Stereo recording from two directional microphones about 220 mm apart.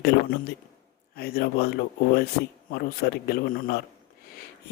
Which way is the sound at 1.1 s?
45° left (ahead or behind).